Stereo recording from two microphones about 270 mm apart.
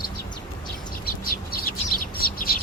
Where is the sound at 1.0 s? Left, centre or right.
Left.